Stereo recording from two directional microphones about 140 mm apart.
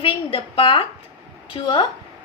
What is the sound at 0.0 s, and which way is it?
A woman's voice, 40° left (ahead or behind).